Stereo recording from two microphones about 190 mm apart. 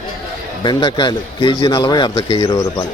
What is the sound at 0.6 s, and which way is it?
A man's voice, 25° left (ahead or behind).